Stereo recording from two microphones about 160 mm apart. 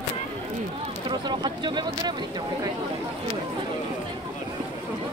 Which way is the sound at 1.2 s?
25° right (ahead or behind).